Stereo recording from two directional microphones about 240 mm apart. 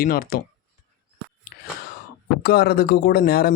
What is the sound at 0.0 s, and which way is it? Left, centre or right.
Speech, left.